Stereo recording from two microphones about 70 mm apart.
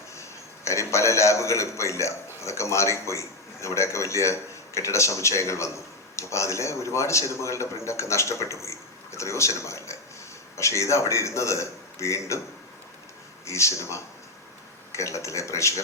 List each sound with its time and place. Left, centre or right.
0.2 s a man's voice: left
13.4 s a man's voice: left